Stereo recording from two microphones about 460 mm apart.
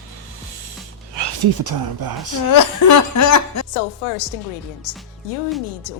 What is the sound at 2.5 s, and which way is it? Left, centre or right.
Speech, left.